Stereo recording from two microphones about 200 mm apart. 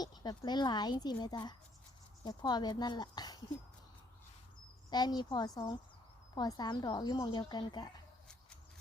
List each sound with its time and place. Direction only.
0.0 s speech: 20° left (ahead or behind)
4.9 s speech: 20° left (ahead or behind)